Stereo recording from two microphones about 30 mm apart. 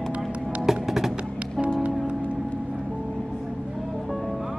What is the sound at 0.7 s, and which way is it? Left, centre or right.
Music, centre.